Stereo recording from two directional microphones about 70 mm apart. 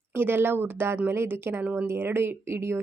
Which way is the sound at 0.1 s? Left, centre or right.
Right.